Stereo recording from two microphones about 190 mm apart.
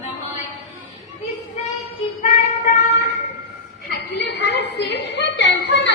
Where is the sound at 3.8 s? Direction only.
60° left (ahead or behind).